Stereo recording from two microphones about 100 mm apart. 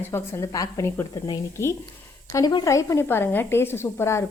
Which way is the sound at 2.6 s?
30° left (ahead or behind).